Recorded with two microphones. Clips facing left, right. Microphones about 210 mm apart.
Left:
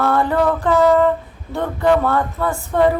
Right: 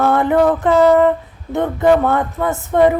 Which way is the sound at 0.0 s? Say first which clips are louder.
Right 3 dB; 20° right (ahead or behind).